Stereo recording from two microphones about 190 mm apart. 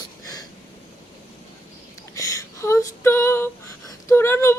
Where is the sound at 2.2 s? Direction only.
15° left (ahead or behind).